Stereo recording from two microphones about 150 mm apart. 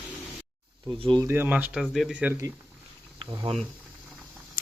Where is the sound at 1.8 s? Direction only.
Centre (ahead or behind).